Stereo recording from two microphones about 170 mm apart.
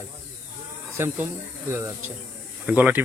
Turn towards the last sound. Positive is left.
turn(degrees=-10)  # may be behind; listen again after turning